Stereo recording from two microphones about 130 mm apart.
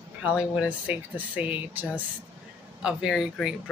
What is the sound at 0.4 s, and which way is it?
Speech, 10° right (ahead or behind).